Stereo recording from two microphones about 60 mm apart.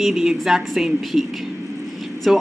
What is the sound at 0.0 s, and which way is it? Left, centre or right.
Speech, centre.